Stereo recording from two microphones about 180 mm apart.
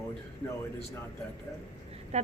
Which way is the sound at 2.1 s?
40° right (ahead or behind).